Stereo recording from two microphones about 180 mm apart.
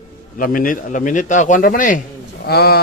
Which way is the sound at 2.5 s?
60° left (ahead or behind).